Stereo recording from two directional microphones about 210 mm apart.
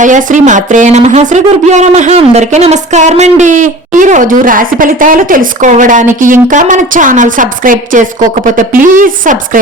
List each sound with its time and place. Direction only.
0.0 s speech: 35° right (ahead or behind)